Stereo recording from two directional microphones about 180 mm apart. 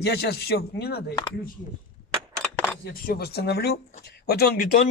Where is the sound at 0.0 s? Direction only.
65° left (ahead or behind).